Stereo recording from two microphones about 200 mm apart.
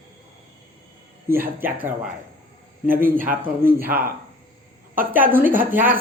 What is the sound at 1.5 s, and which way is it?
Speech, 10° right (ahead or behind).